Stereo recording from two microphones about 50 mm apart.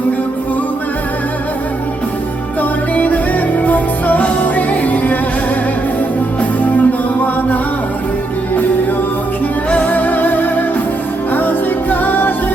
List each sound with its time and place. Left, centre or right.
2.6 s music: left
6.6 s music: left
9.6 s music: left